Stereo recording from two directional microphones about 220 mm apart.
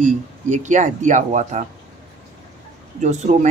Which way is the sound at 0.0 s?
35° right (ahead or behind).